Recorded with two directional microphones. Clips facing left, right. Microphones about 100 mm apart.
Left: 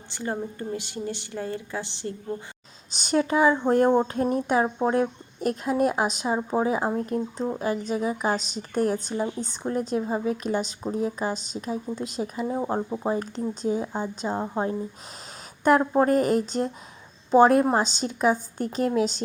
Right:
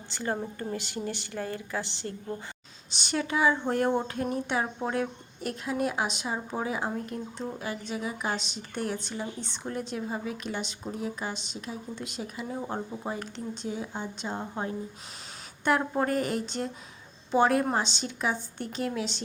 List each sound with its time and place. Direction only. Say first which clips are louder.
0.1 s a woman's voice: left 2 dB; 20° left (ahead or behind)
2.9 s a woman's voice: left 7 dB; 40° left (ahead or behind)